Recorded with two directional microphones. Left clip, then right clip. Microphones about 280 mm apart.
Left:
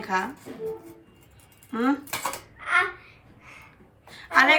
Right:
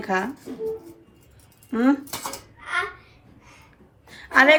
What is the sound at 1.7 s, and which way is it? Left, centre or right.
Speech, centre.